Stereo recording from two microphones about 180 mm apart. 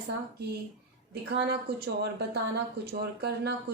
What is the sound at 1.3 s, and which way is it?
Speech, 65° right (ahead or behind).